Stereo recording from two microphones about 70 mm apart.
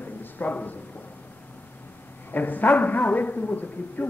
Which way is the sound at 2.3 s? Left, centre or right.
Left.